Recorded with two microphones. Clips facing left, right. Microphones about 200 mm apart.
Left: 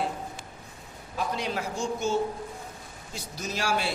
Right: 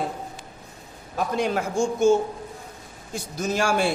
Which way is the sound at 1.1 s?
50° right (ahead or behind).